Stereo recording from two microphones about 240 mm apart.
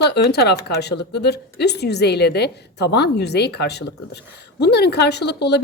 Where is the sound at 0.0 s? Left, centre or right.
Left.